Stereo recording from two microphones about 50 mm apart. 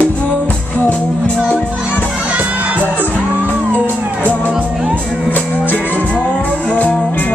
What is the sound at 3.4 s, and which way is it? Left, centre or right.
Music, left.